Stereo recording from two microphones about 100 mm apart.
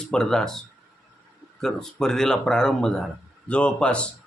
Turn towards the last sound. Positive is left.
turn(degrees=10)  # may be behind; listen again after turning